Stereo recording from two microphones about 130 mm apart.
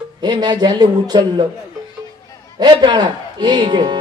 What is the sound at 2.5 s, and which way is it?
Speech, 35° right (ahead or behind).